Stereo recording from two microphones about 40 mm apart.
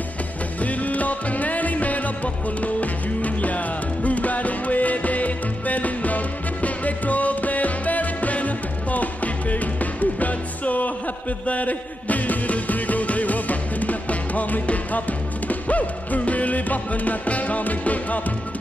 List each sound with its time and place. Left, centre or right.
0.6 s music: left